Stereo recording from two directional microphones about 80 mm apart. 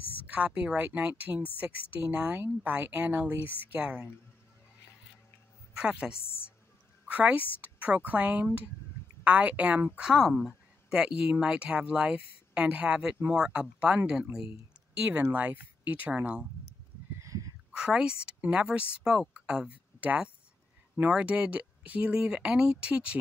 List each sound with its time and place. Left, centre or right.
0.3 s a woman's voice: centre
5.8 s a woman's voice: centre
15.0 s speech: right
17.2 s a sound: right
17.7 s a woman's voice: centre